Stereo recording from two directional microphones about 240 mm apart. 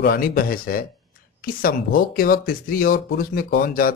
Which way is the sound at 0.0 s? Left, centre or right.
Left.